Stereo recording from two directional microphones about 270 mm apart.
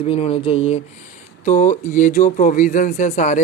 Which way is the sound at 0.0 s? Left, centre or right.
Left.